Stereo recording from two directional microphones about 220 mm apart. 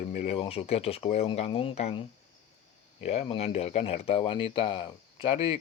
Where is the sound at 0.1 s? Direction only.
30° left (ahead or behind).